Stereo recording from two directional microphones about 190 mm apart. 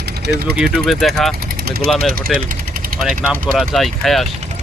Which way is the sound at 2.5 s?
50° right (ahead or behind).